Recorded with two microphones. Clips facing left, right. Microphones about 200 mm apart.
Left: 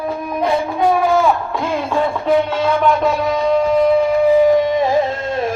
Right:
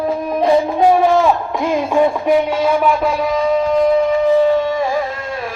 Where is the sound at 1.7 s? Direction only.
15° right (ahead or behind); by 4.9 s 15° left (ahead or behind).